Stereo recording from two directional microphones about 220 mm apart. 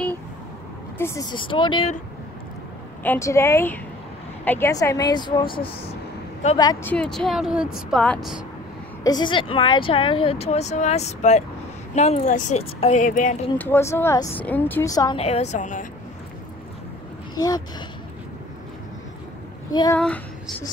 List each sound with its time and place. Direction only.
0.9 s speech: 10° left (ahead or behind)
3.0 s a woman's voice: 10° left (ahead or behind)
9.0 s speech: 20° left (ahead or behind); by 13.5 s 35° left (ahead or behind)
13.6 s a woman's voice: 10° left (ahead or behind)
15.2 s speech: 30° left (ahead or behind)
19.7 s speech: 20° left (ahead or behind)